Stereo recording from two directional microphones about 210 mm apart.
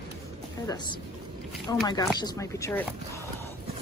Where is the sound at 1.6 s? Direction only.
15° left (ahead or behind).